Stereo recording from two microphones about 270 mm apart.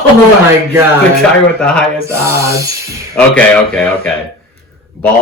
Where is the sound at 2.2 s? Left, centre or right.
Centre.